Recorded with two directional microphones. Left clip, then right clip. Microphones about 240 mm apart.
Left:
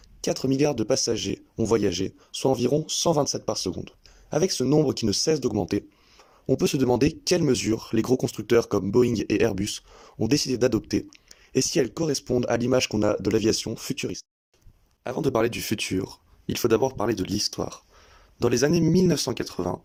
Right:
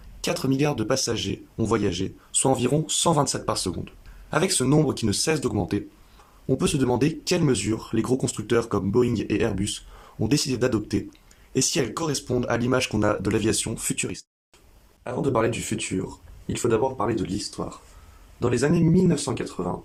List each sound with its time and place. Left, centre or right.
0.2 s speech: left
15.0 s speech: left